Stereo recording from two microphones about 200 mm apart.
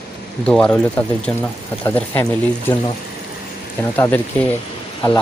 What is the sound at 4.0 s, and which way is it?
Speech, 10° left (ahead or behind).